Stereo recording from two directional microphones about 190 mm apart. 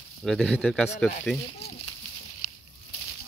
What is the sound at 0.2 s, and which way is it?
Speech, 5° left (ahead or behind).